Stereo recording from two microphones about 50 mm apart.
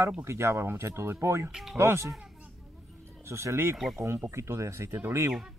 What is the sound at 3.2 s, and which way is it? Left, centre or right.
Speech, right.